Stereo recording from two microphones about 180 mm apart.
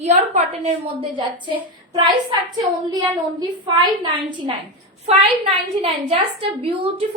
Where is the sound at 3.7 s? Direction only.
25° right (ahead or behind).